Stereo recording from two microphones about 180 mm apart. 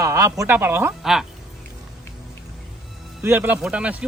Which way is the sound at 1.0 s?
Centre (ahead or behind).